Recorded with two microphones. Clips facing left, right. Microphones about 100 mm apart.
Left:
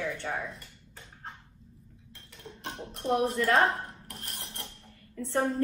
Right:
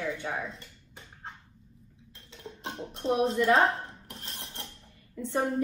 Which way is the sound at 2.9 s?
25° right (ahead or behind).